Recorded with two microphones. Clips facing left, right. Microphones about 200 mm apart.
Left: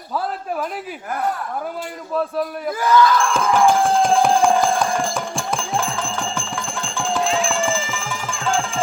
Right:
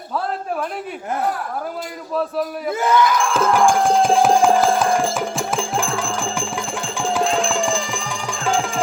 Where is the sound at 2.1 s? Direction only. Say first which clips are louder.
Even; centre (ahead or behind).